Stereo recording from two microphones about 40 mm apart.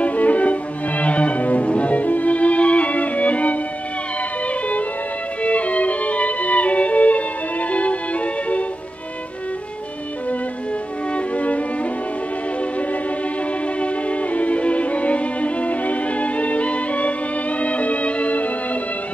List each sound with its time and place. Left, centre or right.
0.0 s music: left
5.4 s music: left
11.1 s music: left
13.7 s music: left